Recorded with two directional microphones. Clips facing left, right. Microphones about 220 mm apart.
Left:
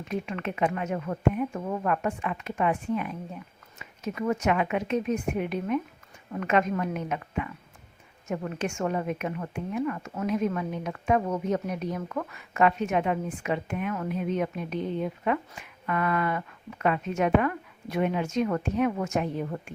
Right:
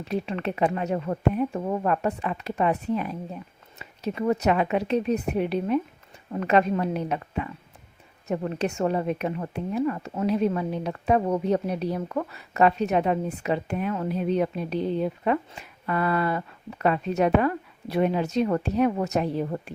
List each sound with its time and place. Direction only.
0.0 s a woman's voice: 35° right (ahead or behind)